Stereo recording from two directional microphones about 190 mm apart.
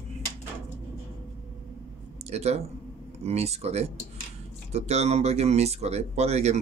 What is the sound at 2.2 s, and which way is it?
Speech, 35° right (ahead or behind).